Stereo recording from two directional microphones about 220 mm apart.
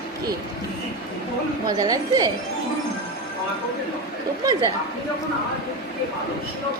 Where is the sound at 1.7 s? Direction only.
15° right (ahead or behind).